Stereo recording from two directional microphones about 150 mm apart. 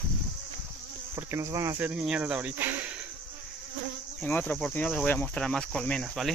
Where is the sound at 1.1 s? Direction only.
15° right (ahead or behind).